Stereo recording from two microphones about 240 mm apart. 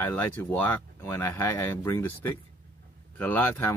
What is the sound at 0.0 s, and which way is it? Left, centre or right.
Speech, centre.